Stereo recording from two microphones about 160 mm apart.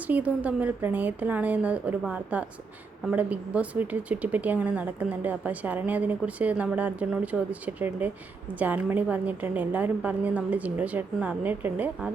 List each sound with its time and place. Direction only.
0.1 s speech: 10° right (ahead or behind)